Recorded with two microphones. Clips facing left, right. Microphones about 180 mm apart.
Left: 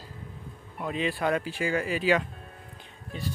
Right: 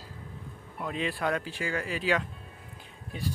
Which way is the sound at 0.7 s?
5° left (ahead or behind).